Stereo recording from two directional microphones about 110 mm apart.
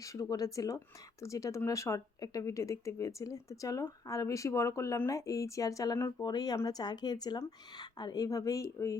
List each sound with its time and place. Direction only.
0.0 s a woman's voice: 30° left (ahead or behind)